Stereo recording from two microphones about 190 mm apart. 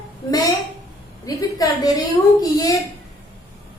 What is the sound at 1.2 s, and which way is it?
Speech, 20° left (ahead or behind).